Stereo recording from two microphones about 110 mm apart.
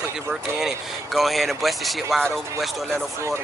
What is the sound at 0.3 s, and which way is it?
Speech, 5° right (ahead or behind).